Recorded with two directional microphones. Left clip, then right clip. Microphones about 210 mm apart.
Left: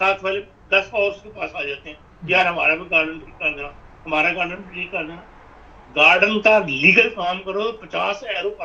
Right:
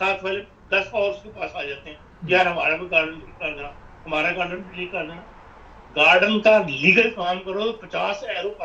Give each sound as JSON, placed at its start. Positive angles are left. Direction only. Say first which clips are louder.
{"t": 0.0, "sound": "a man's voice", "louder": "left 4 dB", "side_deg": 20}
{"t": 5.9, "sound": "a man's voice", "louder": "left 2 dB", "side_deg": 20}